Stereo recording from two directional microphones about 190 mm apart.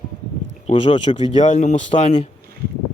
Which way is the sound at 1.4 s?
40° left (ahead or behind).